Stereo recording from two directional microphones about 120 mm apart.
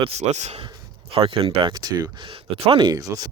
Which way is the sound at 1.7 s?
30° right (ahead or behind).